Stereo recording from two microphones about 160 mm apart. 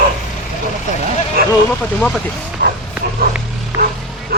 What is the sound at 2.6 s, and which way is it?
Pig, 90° right.